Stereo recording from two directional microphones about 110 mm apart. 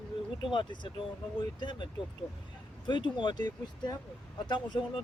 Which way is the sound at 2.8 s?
45° left (ahead or behind).